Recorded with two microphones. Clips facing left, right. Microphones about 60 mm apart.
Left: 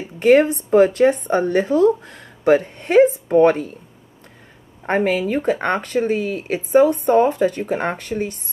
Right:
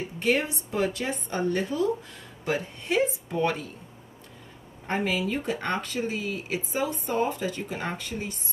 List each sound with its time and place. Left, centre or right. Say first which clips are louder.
0.2 s speech: left 13 dB; left
4.8 s speech: left 9 dB; left